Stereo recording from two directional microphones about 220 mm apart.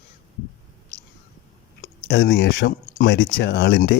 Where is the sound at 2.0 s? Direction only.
50° left (ahead or behind).